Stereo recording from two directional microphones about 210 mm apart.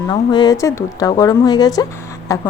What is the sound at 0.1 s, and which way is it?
Speech, 20° left (ahead or behind).